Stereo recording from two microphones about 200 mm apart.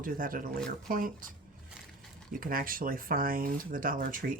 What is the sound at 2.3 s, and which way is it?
Speech, 45° right (ahead or behind).